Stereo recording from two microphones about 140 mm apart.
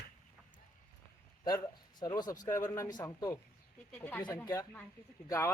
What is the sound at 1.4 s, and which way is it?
Speech, 30° left (ahead or behind).